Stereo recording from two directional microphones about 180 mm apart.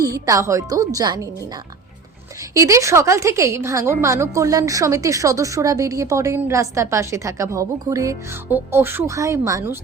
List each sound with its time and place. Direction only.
0.0 s a woman's voice: 20° right (ahead or behind)
2.6 s a woman's voice: 15° right (ahead or behind)